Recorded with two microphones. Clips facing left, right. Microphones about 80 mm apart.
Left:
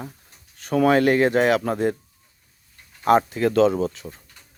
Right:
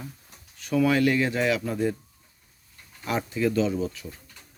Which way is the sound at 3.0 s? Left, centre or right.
Left.